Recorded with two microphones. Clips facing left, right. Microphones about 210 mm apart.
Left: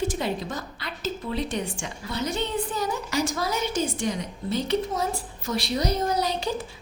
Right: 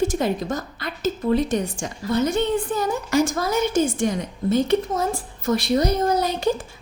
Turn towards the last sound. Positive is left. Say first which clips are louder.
# right 5 dB
turn(degrees=-50)  # may be behind; listen again after turning